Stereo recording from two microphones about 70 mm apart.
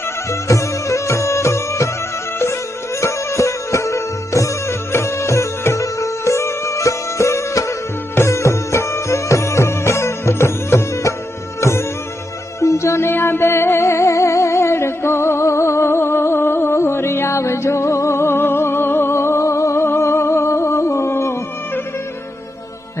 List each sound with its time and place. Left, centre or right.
0.3 s music: left
3.0 s music: left